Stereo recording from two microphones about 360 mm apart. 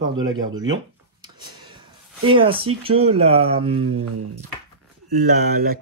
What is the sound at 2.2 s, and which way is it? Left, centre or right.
Speech, centre.